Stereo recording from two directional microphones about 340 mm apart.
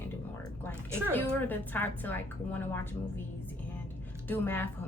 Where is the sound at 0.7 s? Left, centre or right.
Centre.